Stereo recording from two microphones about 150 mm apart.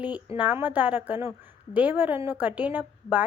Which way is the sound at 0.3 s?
10° right (ahead or behind).